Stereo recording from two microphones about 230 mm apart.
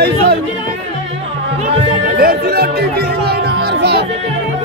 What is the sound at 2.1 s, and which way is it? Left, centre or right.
Speech, right.